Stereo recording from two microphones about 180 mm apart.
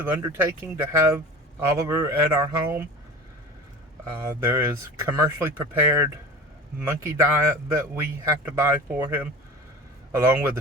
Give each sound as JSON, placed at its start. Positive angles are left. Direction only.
{"t": 0.2, "sound": "speech", "side_deg": -15}
{"t": 4.1, "sound": "speech", "side_deg": -15}